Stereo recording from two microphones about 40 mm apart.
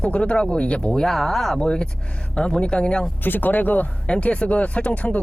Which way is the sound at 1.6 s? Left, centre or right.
Left.